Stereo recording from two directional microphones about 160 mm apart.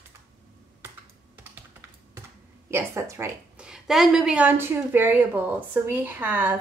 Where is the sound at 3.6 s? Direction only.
5° right (ahead or behind).